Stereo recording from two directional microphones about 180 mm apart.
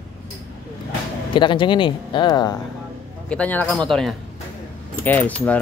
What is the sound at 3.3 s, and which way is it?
A man's voice, 10° left (ahead or behind).